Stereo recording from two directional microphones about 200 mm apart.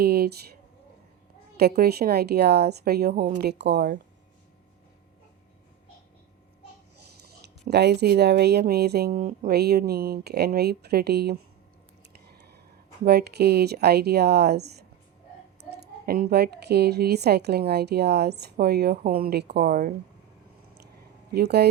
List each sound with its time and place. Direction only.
0.0 s a sound: 50° right (ahead or behind)
1.5 s a woman's voice: 50° right (ahead or behind)
7.4 s a woman's voice: 55° right (ahead or behind)
13.1 s a woman's voice: 55° right (ahead or behind)
21.3 s a woman's voice: 55° right (ahead or behind)